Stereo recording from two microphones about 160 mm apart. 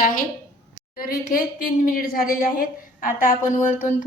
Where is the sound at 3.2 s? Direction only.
55° left (ahead or behind).